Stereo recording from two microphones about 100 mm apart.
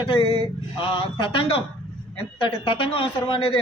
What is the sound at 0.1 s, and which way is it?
A man's voice, 70° left (ahead or behind).